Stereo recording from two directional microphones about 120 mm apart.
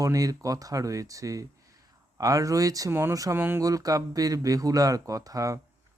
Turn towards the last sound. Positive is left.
turn(degrees=-30)  # may be behind; listen again after turning